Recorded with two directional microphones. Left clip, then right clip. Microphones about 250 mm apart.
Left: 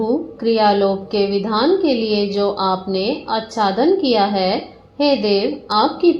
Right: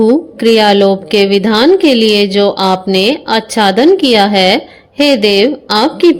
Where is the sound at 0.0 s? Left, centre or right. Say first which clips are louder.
Right 10 dB; right.